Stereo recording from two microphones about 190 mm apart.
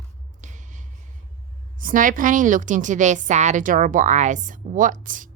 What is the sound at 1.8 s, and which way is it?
A woman's voice, 45° right (ahead or behind).